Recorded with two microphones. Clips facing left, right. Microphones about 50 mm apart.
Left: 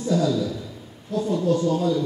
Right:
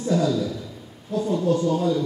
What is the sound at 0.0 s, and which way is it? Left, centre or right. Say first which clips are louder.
A man's voice: even; right.